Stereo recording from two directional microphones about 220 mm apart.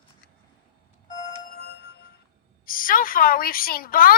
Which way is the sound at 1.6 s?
50° left (ahead or behind).